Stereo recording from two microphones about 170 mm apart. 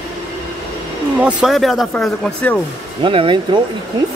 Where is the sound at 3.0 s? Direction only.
30° right (ahead or behind).